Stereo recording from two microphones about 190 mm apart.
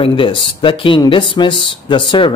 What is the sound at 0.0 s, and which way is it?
Speech, 25° left (ahead or behind).